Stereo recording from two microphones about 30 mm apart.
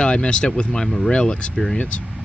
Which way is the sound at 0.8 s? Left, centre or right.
Centre.